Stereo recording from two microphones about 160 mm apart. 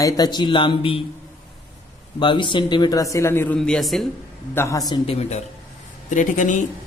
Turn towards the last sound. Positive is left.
turn(degrees=50)  # may be behind; listen again after turning